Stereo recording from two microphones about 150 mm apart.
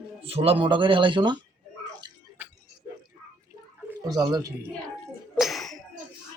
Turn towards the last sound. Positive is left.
turn(degrees=0)  # may be behind; listen again after turning